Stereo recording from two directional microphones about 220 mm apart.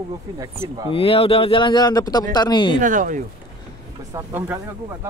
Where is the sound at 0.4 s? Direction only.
15° right (ahead or behind).